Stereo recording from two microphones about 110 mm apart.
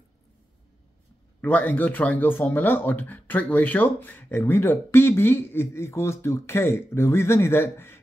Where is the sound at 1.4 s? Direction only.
15° left (ahead or behind).